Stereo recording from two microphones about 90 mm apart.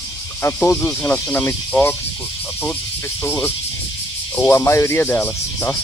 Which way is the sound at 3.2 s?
25° left (ahead or behind).